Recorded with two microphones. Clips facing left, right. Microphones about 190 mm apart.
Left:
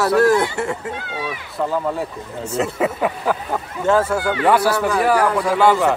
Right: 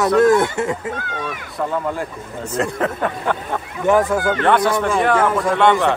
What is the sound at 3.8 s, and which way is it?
Speech, 20° right (ahead or behind).